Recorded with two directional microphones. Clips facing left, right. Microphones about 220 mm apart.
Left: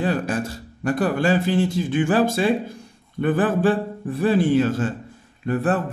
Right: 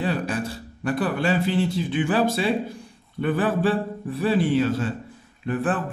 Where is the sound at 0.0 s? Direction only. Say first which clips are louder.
Left 3 dB; 45° left (ahead or behind).